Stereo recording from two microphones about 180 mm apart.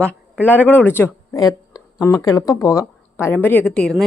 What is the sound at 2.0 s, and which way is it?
Speech, 15° left (ahead or behind).